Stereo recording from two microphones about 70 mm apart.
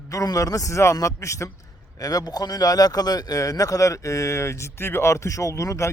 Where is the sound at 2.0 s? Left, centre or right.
Left.